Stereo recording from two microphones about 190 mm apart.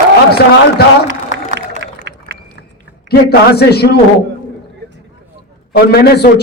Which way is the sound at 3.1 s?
60° left (ahead or behind).